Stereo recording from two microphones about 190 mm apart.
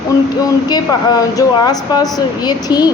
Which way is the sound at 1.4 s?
20° left (ahead or behind).